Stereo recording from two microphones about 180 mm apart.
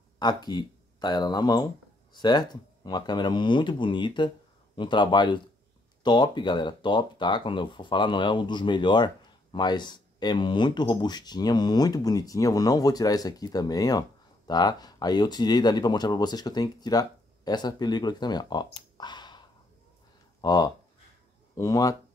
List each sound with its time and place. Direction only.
0.2 s speech: 25° left (ahead or behind)